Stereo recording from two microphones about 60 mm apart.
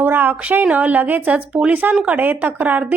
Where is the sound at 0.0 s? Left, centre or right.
Right.